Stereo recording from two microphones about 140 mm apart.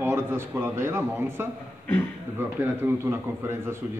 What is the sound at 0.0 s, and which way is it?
Speech, 15° right (ahead or behind).